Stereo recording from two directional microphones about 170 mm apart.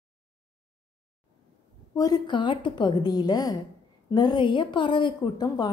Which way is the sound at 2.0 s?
25° left (ahead or behind).